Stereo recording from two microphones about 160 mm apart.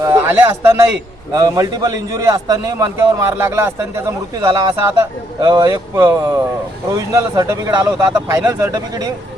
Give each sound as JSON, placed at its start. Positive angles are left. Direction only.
{"t": 0.0, "sound": "a man's voice", "side_deg": -15}